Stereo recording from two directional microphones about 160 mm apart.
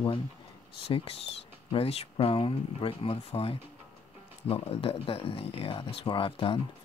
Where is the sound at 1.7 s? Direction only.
40° left (ahead or behind).